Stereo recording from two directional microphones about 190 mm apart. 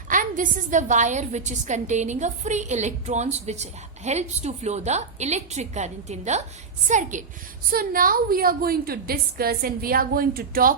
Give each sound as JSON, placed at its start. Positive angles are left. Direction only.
{"t": 0.1, "sound": "a woman's voice", "side_deg": -45}